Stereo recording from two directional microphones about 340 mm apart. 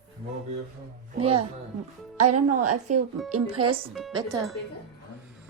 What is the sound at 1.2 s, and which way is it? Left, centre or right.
Speech, right.